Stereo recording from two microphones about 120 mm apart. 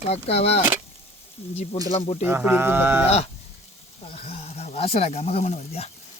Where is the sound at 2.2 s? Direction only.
15° right (ahead or behind).